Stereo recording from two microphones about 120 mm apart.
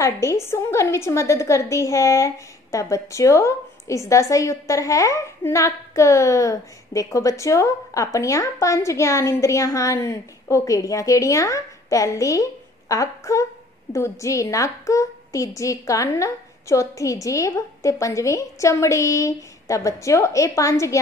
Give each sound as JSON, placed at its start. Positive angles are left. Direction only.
{"t": 0.0, "sound": "a woman's voice", "side_deg": 25}